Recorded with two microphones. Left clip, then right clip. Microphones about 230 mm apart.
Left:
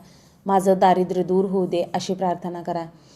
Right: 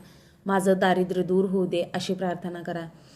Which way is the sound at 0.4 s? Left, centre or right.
Centre.